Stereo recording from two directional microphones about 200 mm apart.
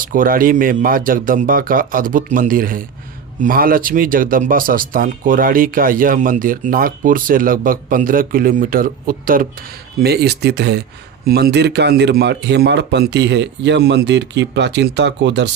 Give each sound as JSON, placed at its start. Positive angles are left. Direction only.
{"t": 0.0, "sound": "speech", "side_deg": -45}